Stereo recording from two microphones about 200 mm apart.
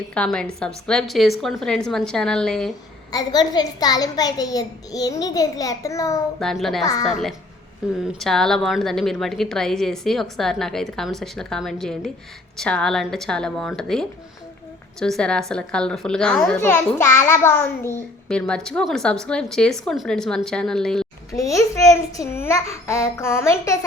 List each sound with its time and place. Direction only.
0.1 s a child's voice: 5° left (ahead or behind)
3.1 s a child's voice: 20° left (ahead or behind)
6.4 s a child's voice: centre (ahead or behind)
21.3 s a child's voice: 15° left (ahead or behind)